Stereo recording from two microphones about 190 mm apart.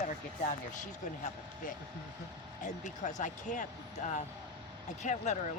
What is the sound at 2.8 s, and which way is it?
Speech, 40° left (ahead or behind).